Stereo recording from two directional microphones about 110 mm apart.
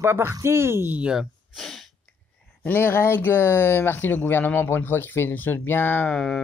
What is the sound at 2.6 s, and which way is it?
Speech, 15° left (ahead or behind).